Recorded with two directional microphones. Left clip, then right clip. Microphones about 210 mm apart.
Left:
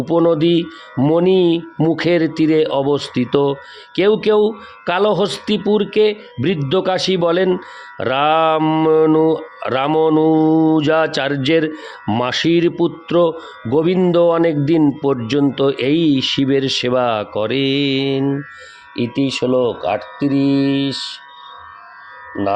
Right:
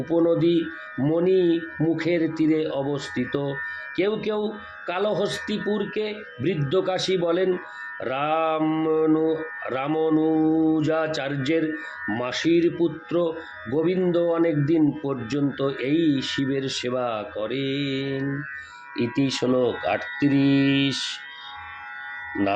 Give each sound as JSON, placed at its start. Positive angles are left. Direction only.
{"t": 0.0, "sound": "speech", "side_deg": 55}
{"t": 18.9, "sound": "speech", "side_deg": 35}